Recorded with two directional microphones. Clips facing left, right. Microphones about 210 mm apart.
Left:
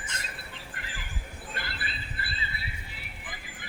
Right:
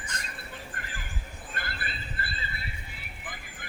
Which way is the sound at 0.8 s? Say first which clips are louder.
Right 1 dB; 45° right (ahead or behind).